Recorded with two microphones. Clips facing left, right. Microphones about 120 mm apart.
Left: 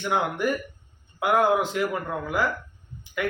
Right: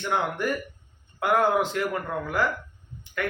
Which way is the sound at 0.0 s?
5° left (ahead or behind).